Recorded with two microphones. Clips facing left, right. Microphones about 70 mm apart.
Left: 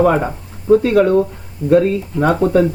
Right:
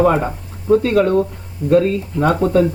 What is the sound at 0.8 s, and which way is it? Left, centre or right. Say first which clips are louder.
Speech: left 2 dB; centre.